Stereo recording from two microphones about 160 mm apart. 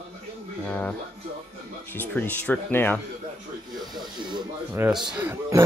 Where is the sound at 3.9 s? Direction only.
30° right (ahead or behind).